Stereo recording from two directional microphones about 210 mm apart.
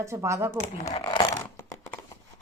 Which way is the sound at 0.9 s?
20° left (ahead or behind).